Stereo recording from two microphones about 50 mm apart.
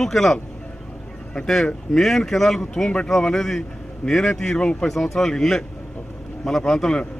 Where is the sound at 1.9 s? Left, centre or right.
Centre.